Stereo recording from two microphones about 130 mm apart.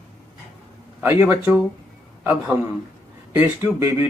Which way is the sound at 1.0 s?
20° right (ahead or behind).